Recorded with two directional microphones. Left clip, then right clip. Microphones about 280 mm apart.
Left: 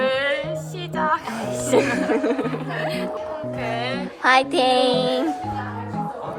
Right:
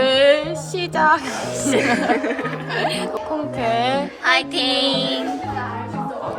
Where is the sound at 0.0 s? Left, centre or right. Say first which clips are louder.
Right 7 dB; centre.